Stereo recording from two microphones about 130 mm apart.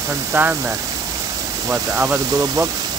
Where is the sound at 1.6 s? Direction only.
15° right (ahead or behind).